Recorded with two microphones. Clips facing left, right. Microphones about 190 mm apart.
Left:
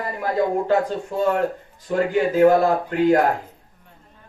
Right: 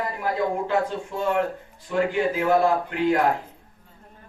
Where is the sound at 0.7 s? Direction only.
40° left (ahead or behind).